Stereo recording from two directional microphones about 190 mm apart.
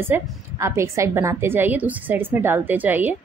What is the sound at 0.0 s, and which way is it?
A woman's voice, 10° right (ahead or behind).